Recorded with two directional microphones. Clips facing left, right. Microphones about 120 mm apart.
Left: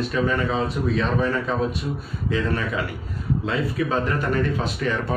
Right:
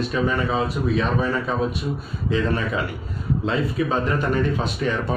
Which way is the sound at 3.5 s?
20° right (ahead or behind).